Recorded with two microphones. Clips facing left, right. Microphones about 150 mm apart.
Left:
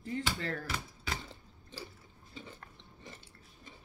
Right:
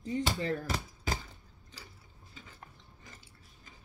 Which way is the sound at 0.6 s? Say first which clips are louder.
Right 4 dB; 40° right (ahead or behind).